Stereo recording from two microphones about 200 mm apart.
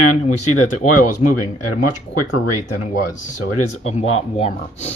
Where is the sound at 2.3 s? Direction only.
80° left.